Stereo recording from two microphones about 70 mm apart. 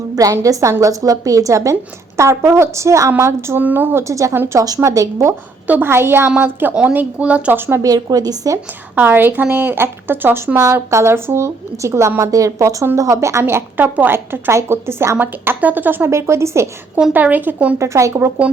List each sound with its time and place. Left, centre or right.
0.4 s a woman's voice: right
3.6 s speech: right
3.9 s a woman's voice: right
5.6 s speech: right
5.9 s speech: right; by 7.5 s centre
7.8 s a woman's voice: right
9.0 s a woman's voice: right
13.4 s speech: right
15.2 s speech: right
17.1 s speech: right
17.7 s a woman's voice: right